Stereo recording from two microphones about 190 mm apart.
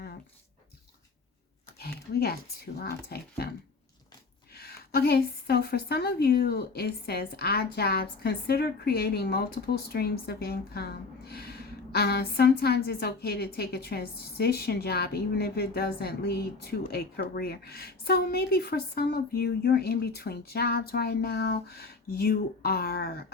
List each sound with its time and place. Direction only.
1.8 s speech: 55° left (ahead or behind)
4.5 s speech: 55° left (ahead or behind)